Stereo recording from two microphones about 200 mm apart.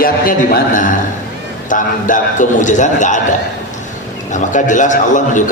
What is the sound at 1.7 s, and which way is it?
A man's voice, 40° left (ahead or behind).